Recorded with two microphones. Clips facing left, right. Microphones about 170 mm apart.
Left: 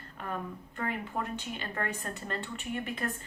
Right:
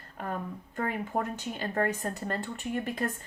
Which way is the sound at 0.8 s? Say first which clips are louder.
Right 4 dB; 40° right (ahead or behind).